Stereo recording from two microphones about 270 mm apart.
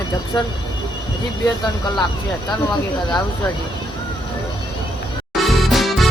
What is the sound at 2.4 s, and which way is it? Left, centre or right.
Speech, centre.